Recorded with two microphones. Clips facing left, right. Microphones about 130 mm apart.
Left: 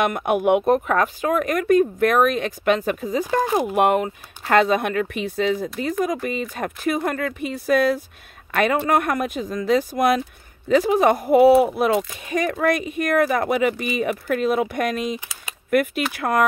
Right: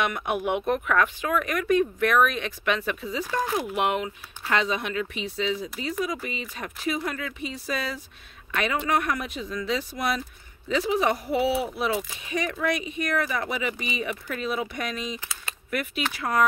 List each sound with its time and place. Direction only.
0.0 s speech: 50° left (ahead or behind)
0.7 s speech: 40° left (ahead or behind); by 16.4 s 55° left (ahead or behind)